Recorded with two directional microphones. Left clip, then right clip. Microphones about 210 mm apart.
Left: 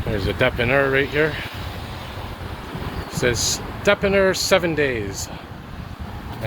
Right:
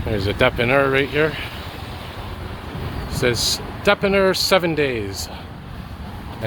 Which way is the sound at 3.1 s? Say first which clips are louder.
Right 2 dB; 10° right (ahead or behind).